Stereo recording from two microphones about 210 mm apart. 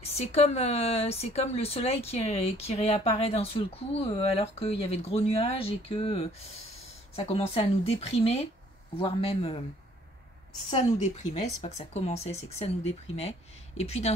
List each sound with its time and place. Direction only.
0.0 s speech: 30° left (ahead or behind)
10.7 s speech: 35° left (ahead or behind)